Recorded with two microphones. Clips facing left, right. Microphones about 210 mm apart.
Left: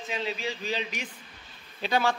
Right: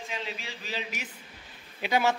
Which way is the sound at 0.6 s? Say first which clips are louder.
Left 4 dB; 5° right (ahead or behind).